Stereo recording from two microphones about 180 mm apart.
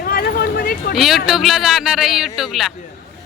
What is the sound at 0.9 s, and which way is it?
Speech, centre (ahead or behind).